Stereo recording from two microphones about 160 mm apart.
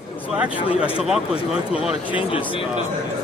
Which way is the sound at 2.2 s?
35° left (ahead or behind).